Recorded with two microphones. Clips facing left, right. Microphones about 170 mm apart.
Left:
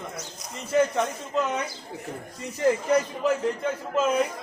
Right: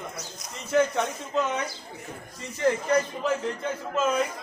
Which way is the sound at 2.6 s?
5° left (ahead or behind).